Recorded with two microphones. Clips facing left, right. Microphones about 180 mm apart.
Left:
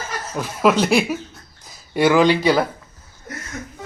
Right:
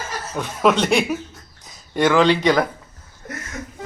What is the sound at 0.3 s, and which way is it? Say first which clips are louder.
Speech: left 1 dB; centre (ahead or behind).